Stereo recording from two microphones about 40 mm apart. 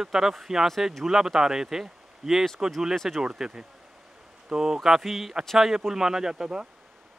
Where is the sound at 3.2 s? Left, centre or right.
Centre.